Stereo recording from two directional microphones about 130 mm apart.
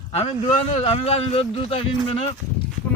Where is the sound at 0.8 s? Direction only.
55° left (ahead or behind).